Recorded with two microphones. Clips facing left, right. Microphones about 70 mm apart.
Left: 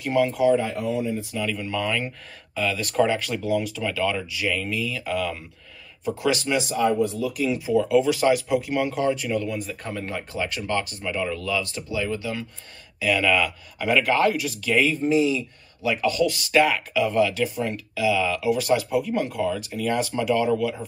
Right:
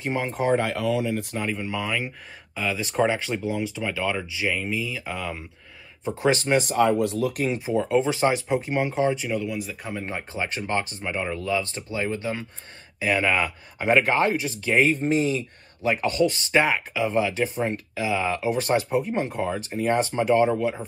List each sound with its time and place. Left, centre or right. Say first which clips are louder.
0.0 s speech: left 5 dB; right
0.6 s speech: right 1 dB; right
1.5 s speech: left 2 dB; centre
6.0 s speech: right 1 dB; right; by 9.4 s centre
9.4 s speech: left 1 dB; centre
9.9 s speech: left 1 dB; right
14.9 s speech: left 1 dB; right